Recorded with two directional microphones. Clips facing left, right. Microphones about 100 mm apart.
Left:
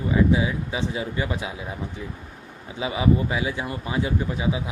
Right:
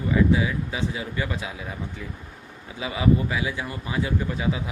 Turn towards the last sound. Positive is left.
turn(degrees=20)  # may be behind; listen again after turning